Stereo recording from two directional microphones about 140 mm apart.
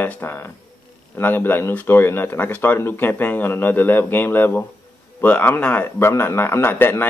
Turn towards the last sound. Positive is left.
turn(degrees=15)  # may be behind; listen again after turning